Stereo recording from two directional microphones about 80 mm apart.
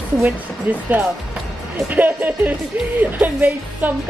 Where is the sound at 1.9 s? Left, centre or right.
Right.